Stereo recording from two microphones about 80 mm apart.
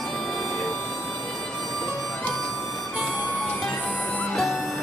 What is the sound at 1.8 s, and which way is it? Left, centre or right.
Music, centre.